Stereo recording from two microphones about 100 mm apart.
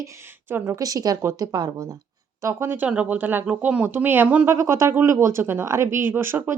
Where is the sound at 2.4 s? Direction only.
30° right (ahead or behind).